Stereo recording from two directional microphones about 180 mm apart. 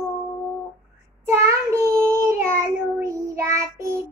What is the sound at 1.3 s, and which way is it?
Child singing, 15° right (ahead or behind).